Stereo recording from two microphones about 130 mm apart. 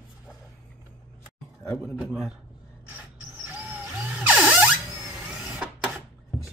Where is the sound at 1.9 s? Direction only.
5° right (ahead or behind).